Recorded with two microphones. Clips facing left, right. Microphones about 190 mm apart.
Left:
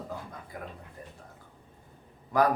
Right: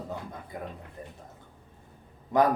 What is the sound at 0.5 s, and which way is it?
Speech, 20° right (ahead or behind).